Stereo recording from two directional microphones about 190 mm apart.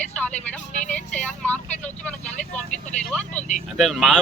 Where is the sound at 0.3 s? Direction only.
35° left (ahead or behind).